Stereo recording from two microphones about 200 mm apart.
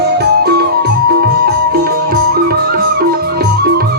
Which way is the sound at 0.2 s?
50° right (ahead or behind).